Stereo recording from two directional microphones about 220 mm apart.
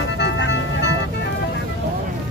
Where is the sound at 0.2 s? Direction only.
50° left (ahead or behind).